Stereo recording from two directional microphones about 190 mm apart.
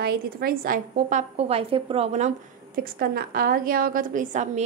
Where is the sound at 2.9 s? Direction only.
50° right (ahead or behind).